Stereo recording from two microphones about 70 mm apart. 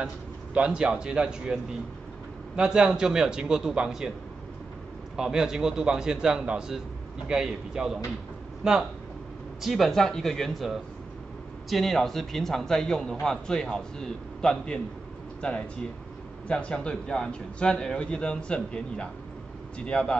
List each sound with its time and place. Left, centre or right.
0.6 s a man's voice: centre
5.1 s a man's voice: centre
9.6 s a man's voice: centre
16.4 s a man's voice: centre